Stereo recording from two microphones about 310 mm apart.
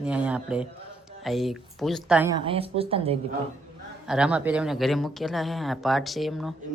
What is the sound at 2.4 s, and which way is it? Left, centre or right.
Speech, centre.